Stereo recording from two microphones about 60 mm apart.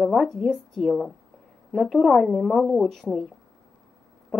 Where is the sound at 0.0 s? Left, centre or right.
Centre.